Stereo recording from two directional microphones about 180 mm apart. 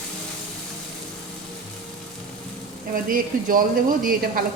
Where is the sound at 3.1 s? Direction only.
50° right (ahead or behind).